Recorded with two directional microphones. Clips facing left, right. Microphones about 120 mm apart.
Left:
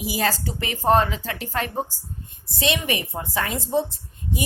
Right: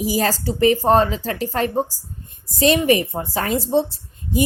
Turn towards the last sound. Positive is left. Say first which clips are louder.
# right 6 dB
turn(degrees=-35)  # may be behind; listen again after turning